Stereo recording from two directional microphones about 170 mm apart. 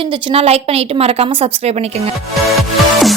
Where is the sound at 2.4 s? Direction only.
Centre (ahead or behind).